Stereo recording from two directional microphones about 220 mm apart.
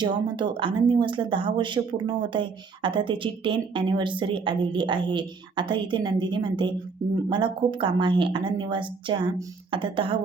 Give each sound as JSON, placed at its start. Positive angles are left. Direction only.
{"t": 0.0, "sound": "speech", "side_deg": -20}